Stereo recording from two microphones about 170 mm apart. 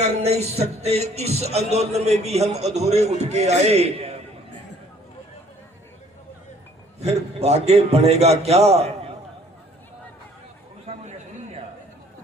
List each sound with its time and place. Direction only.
0.0 s speech: 40° right (ahead or behind)
7.0 s speech: 40° right (ahead or behind)
10.8 s a sound: 40° right (ahead or behind)